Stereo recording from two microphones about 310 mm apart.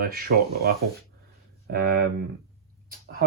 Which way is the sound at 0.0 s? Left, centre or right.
Right.